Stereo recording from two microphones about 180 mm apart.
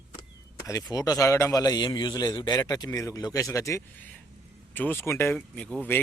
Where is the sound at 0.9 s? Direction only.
20° left (ahead or behind).